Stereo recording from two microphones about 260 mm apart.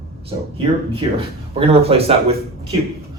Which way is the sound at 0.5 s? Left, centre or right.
Right.